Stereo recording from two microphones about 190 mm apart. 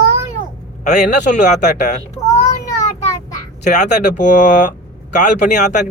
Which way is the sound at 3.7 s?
40° left (ahead or behind).